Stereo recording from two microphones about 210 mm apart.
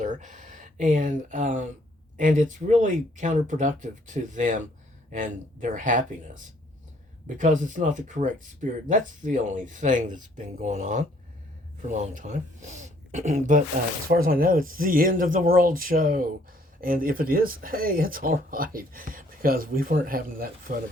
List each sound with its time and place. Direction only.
0.0 s speech: 35° right (ahead or behind)